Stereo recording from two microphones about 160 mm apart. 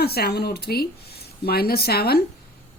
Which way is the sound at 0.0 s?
80° left.